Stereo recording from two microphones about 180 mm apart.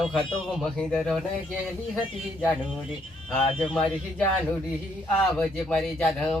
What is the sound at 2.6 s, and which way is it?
A man's voice, 5° right (ahead or behind).